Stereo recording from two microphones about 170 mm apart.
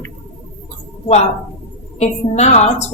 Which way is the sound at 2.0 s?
40° left (ahead or behind).